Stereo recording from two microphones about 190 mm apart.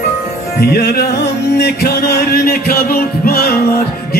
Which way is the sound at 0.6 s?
55° left (ahead or behind).